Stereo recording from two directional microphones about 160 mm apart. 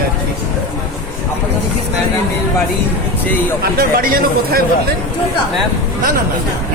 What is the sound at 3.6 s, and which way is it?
Speech, 70° right (ahead or behind).